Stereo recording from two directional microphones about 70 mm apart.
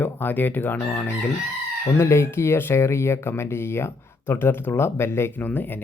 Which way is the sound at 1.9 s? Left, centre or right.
Left.